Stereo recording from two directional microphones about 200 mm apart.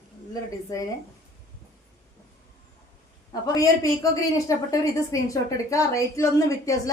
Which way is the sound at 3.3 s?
15° left (ahead or behind).